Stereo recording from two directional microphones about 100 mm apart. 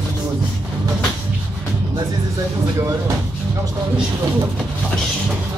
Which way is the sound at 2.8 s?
35° right (ahead or behind).